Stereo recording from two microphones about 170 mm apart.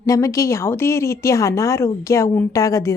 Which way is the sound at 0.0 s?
20° left (ahead or behind).